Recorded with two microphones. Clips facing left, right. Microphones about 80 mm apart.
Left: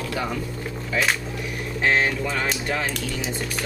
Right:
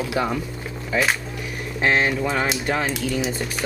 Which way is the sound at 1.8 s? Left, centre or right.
Right.